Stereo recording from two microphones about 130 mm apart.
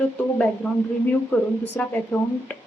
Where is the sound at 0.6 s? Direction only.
15° left (ahead or behind).